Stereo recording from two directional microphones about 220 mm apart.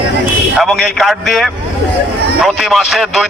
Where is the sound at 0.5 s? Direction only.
Centre (ahead or behind).